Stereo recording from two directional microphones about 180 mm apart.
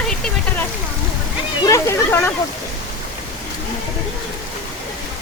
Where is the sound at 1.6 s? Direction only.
15° left (ahead or behind).